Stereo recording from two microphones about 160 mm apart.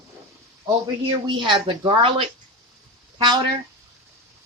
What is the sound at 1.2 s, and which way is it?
Speech, 30° right (ahead or behind).